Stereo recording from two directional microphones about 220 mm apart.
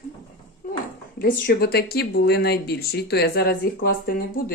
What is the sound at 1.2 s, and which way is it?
Speech, 45° left (ahead or behind).